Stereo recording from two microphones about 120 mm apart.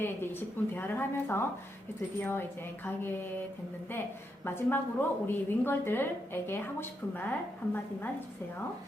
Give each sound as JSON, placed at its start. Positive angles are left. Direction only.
{"t": 0.0, "sound": "a woman's voice", "side_deg": 15}
{"t": 4.4, "sound": "a woman's voice", "side_deg": 15}